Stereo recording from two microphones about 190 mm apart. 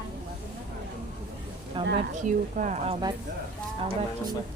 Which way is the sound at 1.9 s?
40° right (ahead or behind).